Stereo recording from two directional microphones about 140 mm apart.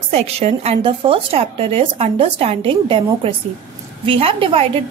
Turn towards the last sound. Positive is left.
turn(degrees=-45)  # may be behind; listen again after turning